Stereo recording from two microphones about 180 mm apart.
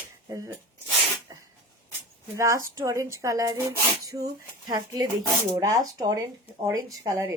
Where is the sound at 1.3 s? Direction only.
20° right (ahead or behind).